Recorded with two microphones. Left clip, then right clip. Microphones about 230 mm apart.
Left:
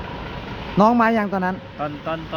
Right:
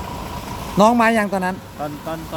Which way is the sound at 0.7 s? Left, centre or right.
Centre.